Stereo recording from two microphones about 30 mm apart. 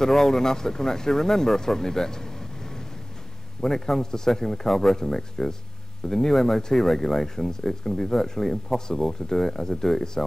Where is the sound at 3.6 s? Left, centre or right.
Centre.